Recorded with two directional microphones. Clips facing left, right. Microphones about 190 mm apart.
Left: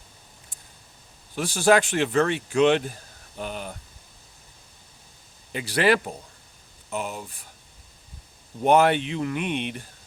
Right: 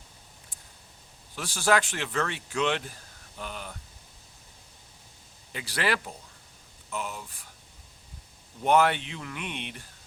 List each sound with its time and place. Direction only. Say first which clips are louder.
1.5 s speech: left 6 dB; 15° left (ahead or behind)
5.5 s speech: left 8 dB; 20° left (ahead or behind)
8.6 s speech: left 4 dB; 20° left (ahead or behind)